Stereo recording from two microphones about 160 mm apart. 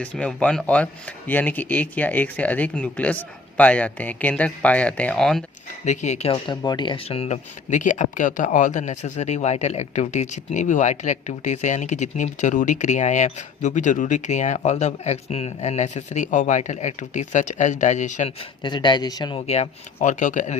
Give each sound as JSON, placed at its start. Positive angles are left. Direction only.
{"t": 0.0, "sound": "speech", "side_deg": 5}
{"t": 5.8, "sound": "speech", "side_deg": 45}
{"t": 6.3, "sound": "speech", "side_deg": 25}
{"t": 18.6, "sound": "speech", "side_deg": 30}
{"t": 20.0, "sound": "speech", "side_deg": 50}